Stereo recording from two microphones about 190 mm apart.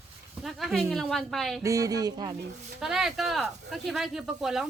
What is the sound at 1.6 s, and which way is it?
Speech, 15° right (ahead or behind).